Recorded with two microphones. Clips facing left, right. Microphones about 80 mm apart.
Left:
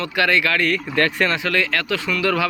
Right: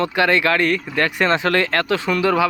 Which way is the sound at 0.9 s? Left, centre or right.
Centre.